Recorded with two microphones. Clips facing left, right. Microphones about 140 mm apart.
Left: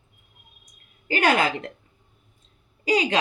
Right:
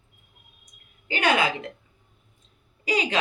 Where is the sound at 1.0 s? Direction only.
40° left (ahead or behind).